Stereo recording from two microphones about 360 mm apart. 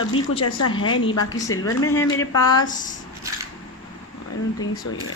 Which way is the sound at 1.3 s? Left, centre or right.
Centre.